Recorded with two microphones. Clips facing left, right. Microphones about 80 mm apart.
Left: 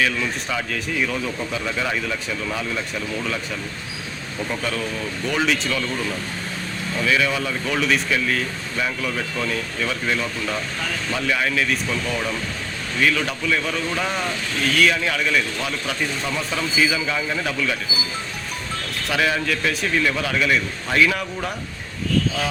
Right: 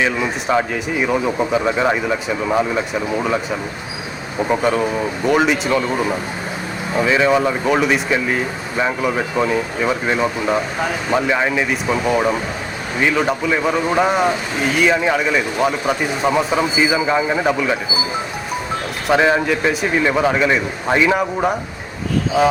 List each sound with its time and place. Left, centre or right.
0.7 s speech: right
4.6 s speech: right
19.1 s speech: right
22.3 s speech: centre